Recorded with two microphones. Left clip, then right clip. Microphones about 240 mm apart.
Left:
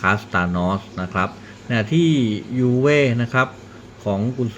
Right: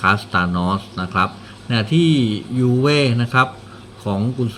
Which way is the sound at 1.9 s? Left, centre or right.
Right.